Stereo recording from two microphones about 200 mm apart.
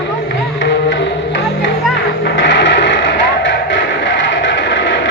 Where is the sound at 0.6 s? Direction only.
65° left (ahead or behind).